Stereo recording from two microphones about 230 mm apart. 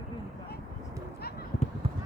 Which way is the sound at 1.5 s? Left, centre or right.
Left.